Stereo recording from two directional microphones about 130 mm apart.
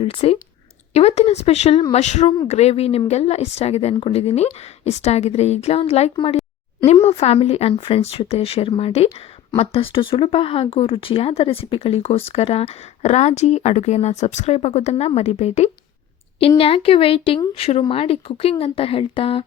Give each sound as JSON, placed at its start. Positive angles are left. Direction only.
{"t": 0.0, "sound": "a woman's voice", "side_deg": 50}
{"t": 16.6, "sound": "speech", "side_deg": 45}